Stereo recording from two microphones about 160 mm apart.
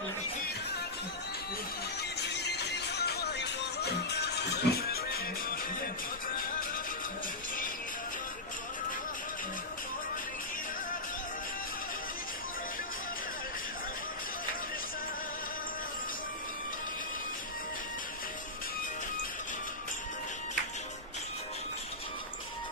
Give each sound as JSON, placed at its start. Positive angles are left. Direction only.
{"t": 2.0, "sound": "music", "side_deg": 90}
{"t": 6.3, "sound": "music", "side_deg": 65}